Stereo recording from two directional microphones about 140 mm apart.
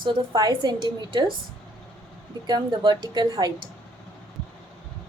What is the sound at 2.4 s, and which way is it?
A woman's voice, 30° right (ahead or behind).